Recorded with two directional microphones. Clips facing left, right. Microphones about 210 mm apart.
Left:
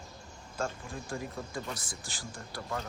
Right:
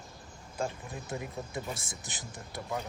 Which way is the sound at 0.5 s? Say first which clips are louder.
Even; 20° right (ahead or behind).